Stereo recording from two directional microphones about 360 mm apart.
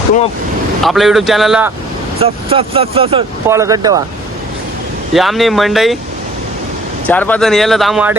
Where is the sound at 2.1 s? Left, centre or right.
Centre.